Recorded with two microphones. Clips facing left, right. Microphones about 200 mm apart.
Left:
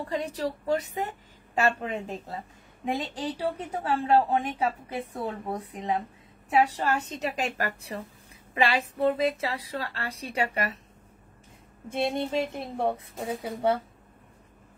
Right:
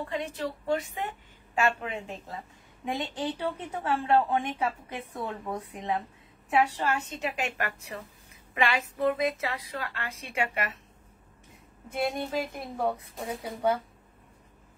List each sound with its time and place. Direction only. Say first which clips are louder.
0.1 s a woman's voice: left 3 dB; 35° left (ahead or behind)
11.9 s a woman's voice: left 2 dB; 25° left (ahead or behind)